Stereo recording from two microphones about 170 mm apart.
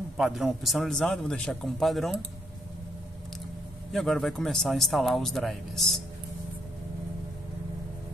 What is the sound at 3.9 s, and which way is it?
A man's voice, centre (ahead or behind).